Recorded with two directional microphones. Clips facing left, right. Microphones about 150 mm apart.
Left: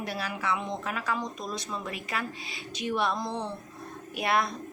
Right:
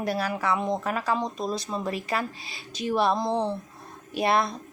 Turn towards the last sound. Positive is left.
turn(degrees=-30)  # may be behind; listen again after turning